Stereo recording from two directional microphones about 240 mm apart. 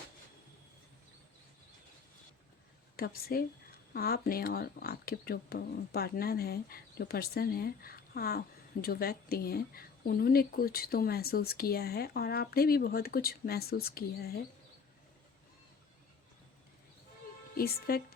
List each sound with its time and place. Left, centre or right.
2.9 s speech: left
17.6 s speech: left